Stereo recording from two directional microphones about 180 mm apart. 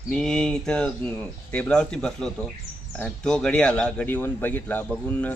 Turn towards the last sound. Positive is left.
turn(degrees=10)  # may be behind; listen again after turning